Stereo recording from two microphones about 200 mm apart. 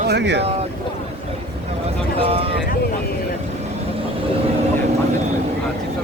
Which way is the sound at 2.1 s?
30° right (ahead or behind).